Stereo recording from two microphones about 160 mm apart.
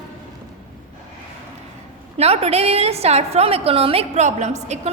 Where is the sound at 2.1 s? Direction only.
40° right (ahead or behind).